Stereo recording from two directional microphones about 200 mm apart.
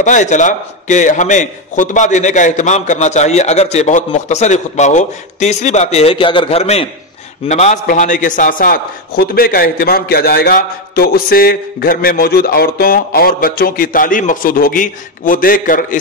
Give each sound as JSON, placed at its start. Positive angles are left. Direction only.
{"t": 0.0, "sound": "a man's voice", "side_deg": 40}